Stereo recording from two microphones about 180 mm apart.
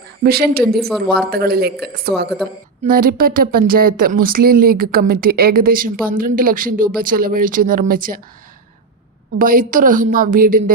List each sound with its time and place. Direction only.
0.2 s a woman's voice: 60° right (ahead or behind)
0.9 s a woman's voice: 5° left (ahead or behind)
1.1 s a woman's voice: 60° right (ahead or behind)
2.8 s speech: 55° right (ahead or behind)
9.4 s speech: 50° right (ahead or behind)